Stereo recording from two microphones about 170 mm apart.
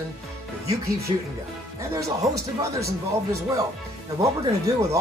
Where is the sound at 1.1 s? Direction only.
25° right (ahead or behind).